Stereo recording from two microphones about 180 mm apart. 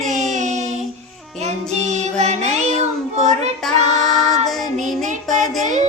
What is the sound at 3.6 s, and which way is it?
Child singing, 5° left (ahead or behind).